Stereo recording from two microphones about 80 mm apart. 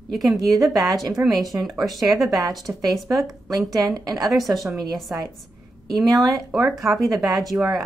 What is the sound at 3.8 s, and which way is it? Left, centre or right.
Speech, right.